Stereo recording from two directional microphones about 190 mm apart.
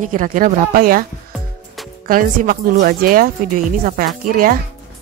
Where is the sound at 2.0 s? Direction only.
50° right (ahead or behind).